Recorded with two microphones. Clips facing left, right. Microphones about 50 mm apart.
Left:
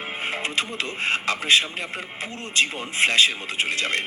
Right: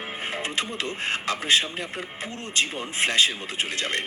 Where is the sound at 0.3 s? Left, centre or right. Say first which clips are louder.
Left 3 dB; left.